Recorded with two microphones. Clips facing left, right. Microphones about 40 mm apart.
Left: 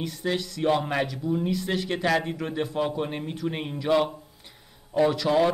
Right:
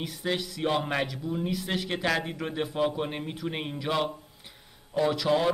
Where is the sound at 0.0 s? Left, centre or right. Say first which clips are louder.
Left 2 dB; centre.